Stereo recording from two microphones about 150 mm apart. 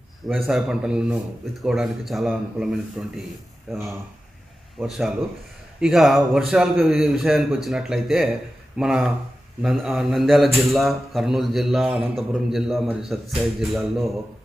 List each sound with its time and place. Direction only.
0.3 s a man's voice: 5° right (ahead or behind)